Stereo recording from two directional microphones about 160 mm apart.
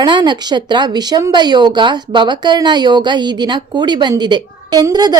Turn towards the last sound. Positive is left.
turn(degrees=-25)  # may be behind; listen again after turning